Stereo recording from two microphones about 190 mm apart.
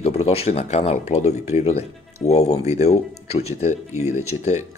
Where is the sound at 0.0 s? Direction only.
30° left (ahead or behind).